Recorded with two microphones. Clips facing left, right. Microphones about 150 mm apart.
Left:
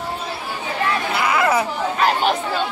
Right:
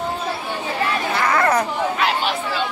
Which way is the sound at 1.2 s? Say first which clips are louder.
Right 1 dB; 10° left (ahead or behind).